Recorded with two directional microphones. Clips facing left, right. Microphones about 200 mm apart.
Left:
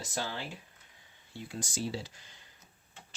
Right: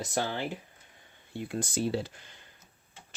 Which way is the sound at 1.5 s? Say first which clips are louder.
Right 6 dB; 55° right (ahead or behind).